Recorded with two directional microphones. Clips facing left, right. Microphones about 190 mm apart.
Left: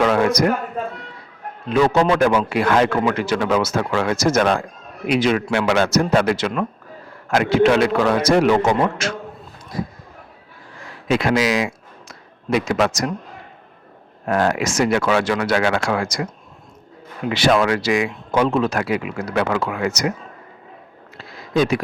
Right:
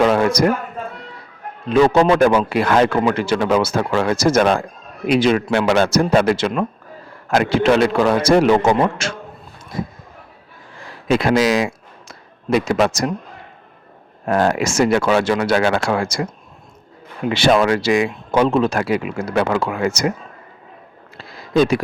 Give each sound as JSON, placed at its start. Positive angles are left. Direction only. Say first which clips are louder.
{"t": 0.0, "sound": "speech", "louder": "right 2 dB", "side_deg": -30}
{"t": 1.9, "sound": "a man's voice", "louder": "right 3 dB", "side_deg": -30}
{"t": 10.8, "sound": "a sound", "louder": "right 2 dB", "side_deg": -35}
{"t": 12.5, "sound": "a man's voice", "louder": "right 2 dB", "side_deg": -35}
{"t": 14.3, "sound": "a man's voice", "louder": "right 2 dB", "side_deg": -35}
{"t": 21.2, "sound": "a sound", "louder": "right 3 dB", "side_deg": -35}